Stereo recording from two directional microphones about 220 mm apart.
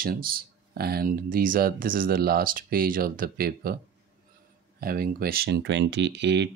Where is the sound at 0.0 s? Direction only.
40° right (ahead or behind).